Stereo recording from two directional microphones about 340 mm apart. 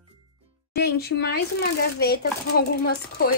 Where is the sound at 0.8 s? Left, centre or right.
Left.